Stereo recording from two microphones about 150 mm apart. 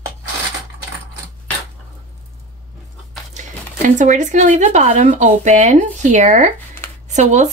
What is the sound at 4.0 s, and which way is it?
Speech, 55° right (ahead or behind).